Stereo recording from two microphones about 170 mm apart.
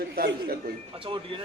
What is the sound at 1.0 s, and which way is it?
Speech, 30° right (ahead or behind).